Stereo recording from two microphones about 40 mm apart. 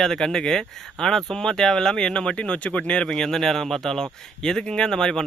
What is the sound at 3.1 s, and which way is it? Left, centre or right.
Speech, centre.